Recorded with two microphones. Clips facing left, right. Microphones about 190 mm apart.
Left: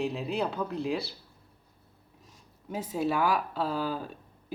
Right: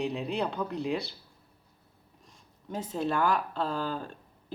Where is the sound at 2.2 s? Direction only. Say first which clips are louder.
Left 1 dB; 10° left (ahead or behind).